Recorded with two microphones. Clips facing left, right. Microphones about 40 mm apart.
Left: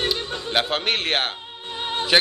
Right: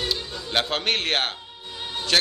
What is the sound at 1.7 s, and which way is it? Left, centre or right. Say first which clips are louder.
Music: left 6 dB; left.